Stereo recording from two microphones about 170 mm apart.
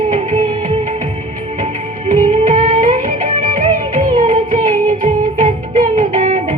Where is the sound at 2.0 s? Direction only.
50° right (ahead or behind).